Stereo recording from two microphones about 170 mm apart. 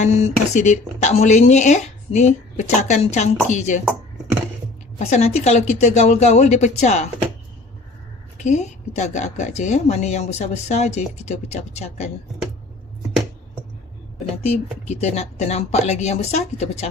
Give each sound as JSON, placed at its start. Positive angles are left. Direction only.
{"t": 0.0, "sound": "speech", "side_deg": 40}
{"t": 4.9, "sound": "speech", "side_deg": 45}
{"t": 8.4, "sound": "a woman's voice", "side_deg": 45}
{"t": 14.8, "sound": "a woman's voice", "side_deg": 40}